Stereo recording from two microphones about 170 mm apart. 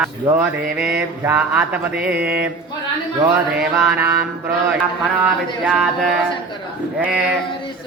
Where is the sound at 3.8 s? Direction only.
5° right (ahead or behind).